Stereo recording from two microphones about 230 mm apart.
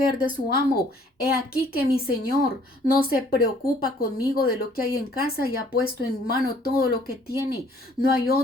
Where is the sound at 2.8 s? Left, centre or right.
Left.